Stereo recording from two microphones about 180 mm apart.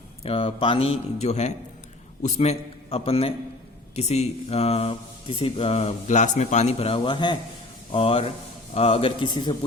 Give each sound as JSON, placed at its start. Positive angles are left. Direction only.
{"t": 0.2, "sound": "a man's voice", "side_deg": 30}